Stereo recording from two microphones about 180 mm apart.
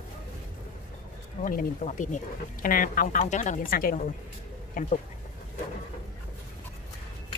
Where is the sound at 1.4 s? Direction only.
50° left (ahead or behind).